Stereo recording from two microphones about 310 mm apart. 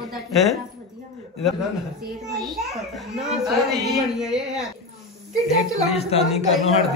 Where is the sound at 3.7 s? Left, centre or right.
Centre.